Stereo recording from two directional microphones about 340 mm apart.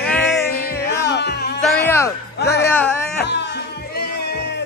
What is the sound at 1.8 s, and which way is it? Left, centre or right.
Music, centre.